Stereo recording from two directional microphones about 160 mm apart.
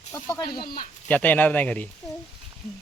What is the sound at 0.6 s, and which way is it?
Speech, 65° left (ahead or behind).